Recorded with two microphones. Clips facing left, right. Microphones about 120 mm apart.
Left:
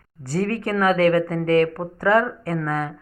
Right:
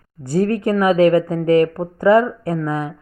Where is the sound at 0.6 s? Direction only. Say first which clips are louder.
Right 4 dB; 15° right (ahead or behind).